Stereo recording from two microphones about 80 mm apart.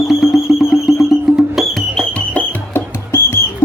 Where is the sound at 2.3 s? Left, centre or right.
Left.